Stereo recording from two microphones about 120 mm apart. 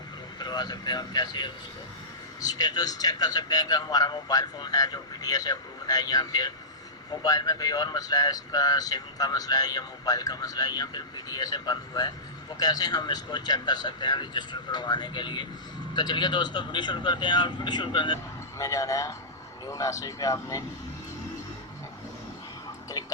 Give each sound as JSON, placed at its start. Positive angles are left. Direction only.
{"t": 0.3, "sound": "speech", "side_deg": 35}
{"t": 18.6, "sound": "speech", "side_deg": 30}
{"t": 22.9, "sound": "speech", "side_deg": 30}